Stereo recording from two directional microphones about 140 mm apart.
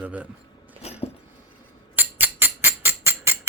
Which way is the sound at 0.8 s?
45° left (ahead or behind).